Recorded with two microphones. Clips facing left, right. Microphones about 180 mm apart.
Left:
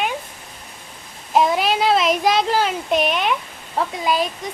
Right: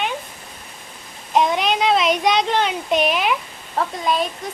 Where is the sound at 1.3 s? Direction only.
5° left (ahead or behind).